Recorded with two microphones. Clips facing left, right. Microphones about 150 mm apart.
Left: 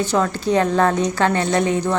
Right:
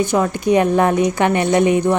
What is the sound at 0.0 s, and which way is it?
A woman's voice, 15° right (ahead or behind).